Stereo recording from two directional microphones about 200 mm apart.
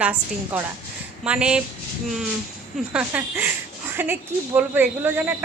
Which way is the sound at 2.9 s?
5° right (ahead or behind).